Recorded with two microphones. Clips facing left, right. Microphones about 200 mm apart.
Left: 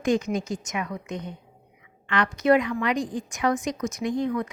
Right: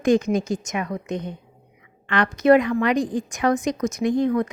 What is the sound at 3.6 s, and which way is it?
Speech, 80° right.